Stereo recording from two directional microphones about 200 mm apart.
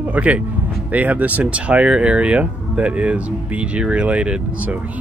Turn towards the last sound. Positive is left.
turn(degrees=-5)  # may be behind; listen again after turning